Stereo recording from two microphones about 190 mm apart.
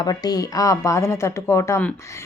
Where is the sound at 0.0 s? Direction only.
20° left (ahead or behind).